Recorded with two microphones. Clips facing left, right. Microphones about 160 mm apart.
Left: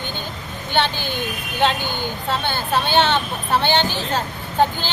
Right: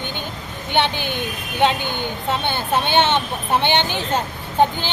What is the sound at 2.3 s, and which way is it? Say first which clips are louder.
A woman's voice: right 1 dB; 20° right (ahead or behind).